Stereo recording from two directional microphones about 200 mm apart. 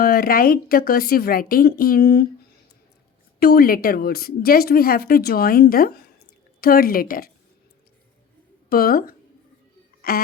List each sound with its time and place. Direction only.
0.0 s speech: 50° left (ahead or behind)
3.4 s speech: 50° left (ahead or behind)
8.7 s speech: 50° left (ahead or behind)